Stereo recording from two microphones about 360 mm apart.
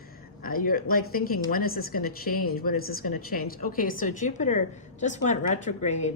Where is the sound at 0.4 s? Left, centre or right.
Left.